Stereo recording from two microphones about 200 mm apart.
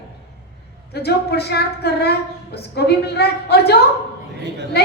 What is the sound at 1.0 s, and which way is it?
A woman's voice, 55° left (ahead or behind).